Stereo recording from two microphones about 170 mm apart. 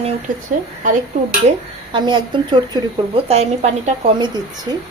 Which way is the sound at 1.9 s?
30° right (ahead or behind).